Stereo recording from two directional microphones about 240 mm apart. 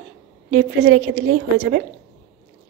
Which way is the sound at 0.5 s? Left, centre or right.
Right.